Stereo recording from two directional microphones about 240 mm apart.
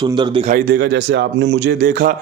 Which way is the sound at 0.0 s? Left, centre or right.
Centre.